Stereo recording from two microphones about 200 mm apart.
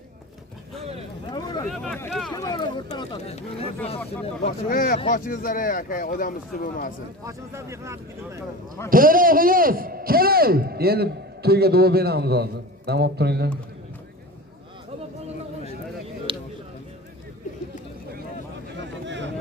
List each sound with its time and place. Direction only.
1.7 s speech: centre (ahead or behind)
2.3 s speech: 20° left (ahead or behind)
4.4 s speech: 45° left (ahead or behind)
7.2 s speech: 15° right (ahead or behind)
8.9 s speech: 45° right (ahead or behind)
16.3 s a sound: 25° right (ahead or behind)
19.0 s a sound: 60° right (ahead or behind)